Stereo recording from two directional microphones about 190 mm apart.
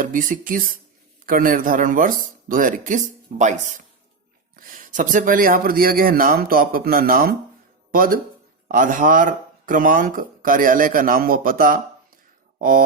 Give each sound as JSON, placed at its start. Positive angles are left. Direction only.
{"t": 0.0, "sound": "speech", "side_deg": -45}